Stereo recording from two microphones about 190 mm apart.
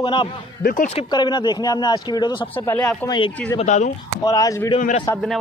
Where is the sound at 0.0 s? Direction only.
25° left (ahead or behind).